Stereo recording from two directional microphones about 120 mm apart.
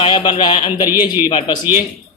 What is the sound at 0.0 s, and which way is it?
Speech, 40° left (ahead or behind).